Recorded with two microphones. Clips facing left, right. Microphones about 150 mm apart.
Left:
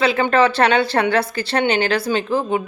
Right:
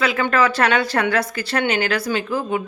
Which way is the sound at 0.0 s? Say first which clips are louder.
Left 3 dB; 25° left (ahead or behind).